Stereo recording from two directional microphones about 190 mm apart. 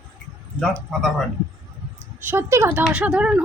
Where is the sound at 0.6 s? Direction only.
5° left (ahead or behind).